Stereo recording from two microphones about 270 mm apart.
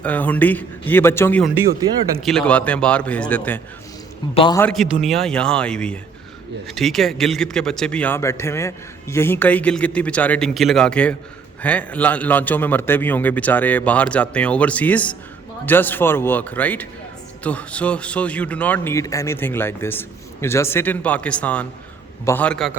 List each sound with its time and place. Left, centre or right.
0.0 s a man's voice: centre
4.4 s a man's voice: centre
4.6 s a man's voice: centre